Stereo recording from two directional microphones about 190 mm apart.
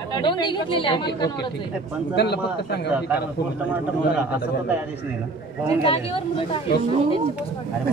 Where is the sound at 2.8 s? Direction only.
5° right (ahead or behind).